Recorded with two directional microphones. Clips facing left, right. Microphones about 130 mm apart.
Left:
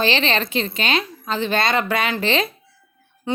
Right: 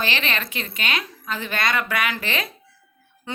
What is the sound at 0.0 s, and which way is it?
A woman's voice, 30° left (ahead or behind).